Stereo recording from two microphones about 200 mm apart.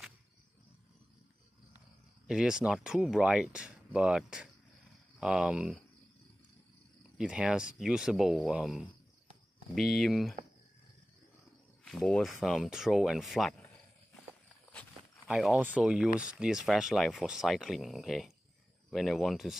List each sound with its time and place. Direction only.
2.2 s speech: 5° right (ahead or behind)
7.0 s speech: 5° right (ahead or behind)
11.8 s speech: 5° left (ahead or behind)
15.2 s speech: 5° right (ahead or behind)